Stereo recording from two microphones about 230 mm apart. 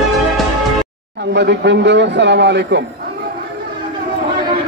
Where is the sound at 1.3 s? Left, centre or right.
Right.